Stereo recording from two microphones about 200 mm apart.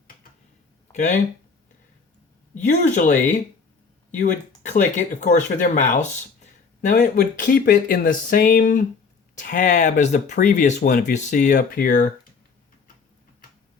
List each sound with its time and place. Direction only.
0.9 s speech: 35° left (ahead or behind)
2.6 s speech: 35° left (ahead or behind)